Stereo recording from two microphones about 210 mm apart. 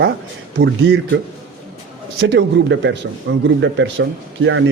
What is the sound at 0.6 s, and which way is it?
Speech, 60° right (ahead or behind).